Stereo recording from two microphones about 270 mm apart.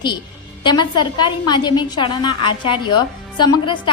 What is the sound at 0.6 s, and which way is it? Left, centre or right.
A woman's voice, centre.